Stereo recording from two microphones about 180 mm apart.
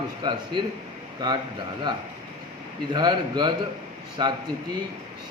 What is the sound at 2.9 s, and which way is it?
A man's voice, 25° right (ahead or behind).